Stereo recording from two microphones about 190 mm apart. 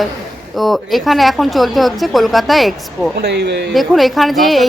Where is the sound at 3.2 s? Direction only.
60° right (ahead or behind).